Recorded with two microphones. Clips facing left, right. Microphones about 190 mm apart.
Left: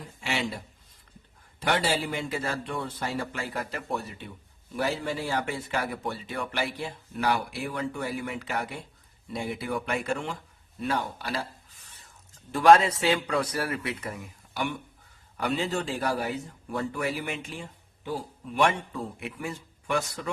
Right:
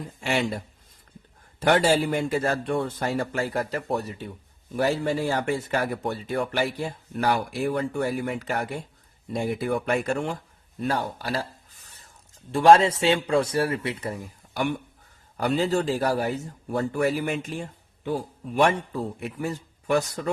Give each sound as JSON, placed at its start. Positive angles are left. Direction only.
{"t": 0.2, "sound": "a man's voice", "side_deg": -45}
{"t": 12.5, "sound": "a man's voice", "side_deg": -30}